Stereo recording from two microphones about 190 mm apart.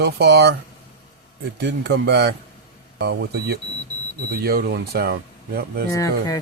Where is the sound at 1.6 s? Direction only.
60° right (ahead or behind).